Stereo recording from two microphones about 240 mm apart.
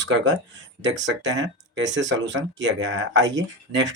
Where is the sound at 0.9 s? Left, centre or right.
Right.